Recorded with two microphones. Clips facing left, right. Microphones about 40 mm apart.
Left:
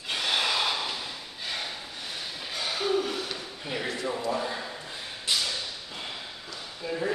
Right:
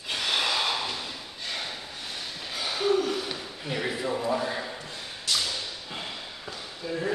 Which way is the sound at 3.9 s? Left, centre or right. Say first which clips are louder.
Right 2 dB; centre.